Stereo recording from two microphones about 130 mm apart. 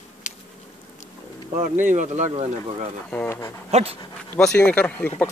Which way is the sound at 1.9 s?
70° right (ahead or behind).